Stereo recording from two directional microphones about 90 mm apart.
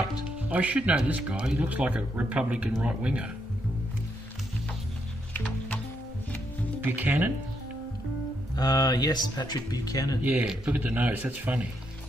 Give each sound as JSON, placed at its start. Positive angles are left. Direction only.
{"t": 0.5, "sound": "a man's voice", "side_deg": -15}
{"t": 6.8, "sound": "speech", "side_deg": -20}
{"t": 8.5, "sound": "speech", "side_deg": 45}
{"t": 10.2, "sound": "a man's voice", "side_deg": -15}